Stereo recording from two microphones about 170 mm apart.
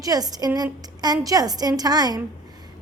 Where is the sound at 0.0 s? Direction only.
20° right (ahead or behind).